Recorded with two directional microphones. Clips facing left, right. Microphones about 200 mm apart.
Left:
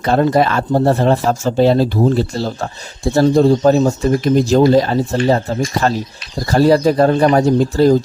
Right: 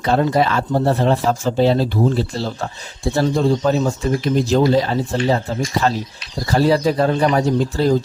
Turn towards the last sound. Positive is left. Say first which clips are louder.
# left 5 dB
turn(degrees=45)  # may be behind; listen again after turning